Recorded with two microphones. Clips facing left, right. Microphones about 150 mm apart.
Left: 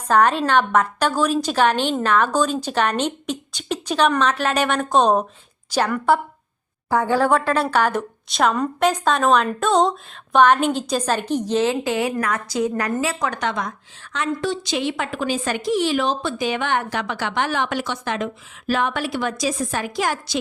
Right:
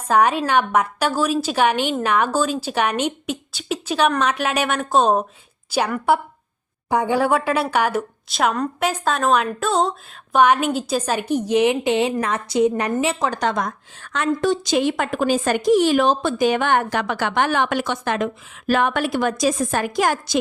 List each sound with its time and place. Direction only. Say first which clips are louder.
0.1 s a woman's voice: even; 10° right (ahead or behind); by 20.4 s 45° right (ahead or behind)